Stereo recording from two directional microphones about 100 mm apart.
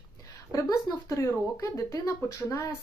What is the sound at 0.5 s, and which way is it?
Speech, 35° left (ahead or behind).